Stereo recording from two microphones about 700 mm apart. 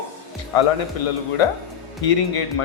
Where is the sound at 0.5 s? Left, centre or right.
Left.